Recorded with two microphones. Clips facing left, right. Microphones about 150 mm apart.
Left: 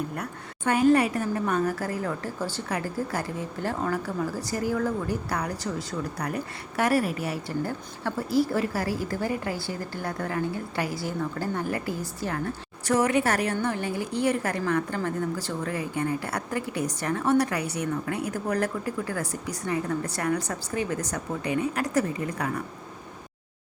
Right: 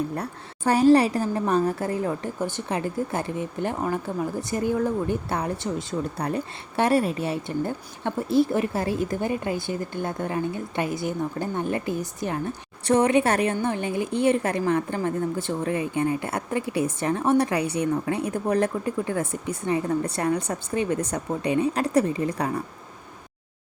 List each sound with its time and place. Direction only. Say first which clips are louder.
0.2 s a woman's voice: right 3 dB; 35° right (ahead or behind)